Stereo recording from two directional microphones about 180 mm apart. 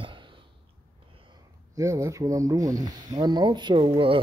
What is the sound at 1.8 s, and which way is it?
Speech, 15° right (ahead or behind).